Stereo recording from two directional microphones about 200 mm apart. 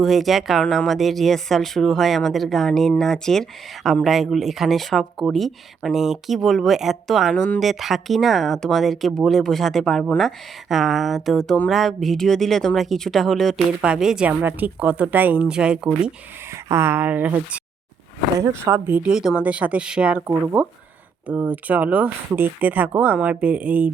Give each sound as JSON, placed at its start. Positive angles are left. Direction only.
{"t": 0.0, "sound": "speech", "side_deg": 0}